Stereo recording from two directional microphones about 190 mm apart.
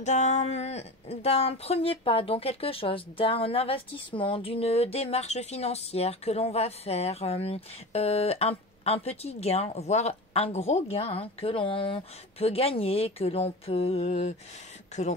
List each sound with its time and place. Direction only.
0.0 s speech: 40° left (ahead or behind)